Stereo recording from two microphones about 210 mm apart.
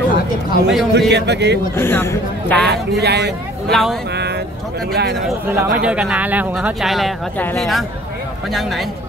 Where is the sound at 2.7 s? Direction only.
50° right (ahead or behind).